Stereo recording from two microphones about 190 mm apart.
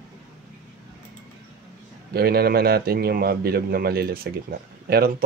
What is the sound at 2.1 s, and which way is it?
A man's voice, 55° right (ahead or behind).